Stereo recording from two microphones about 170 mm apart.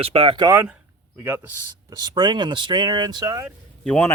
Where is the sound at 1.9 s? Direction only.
25° right (ahead or behind).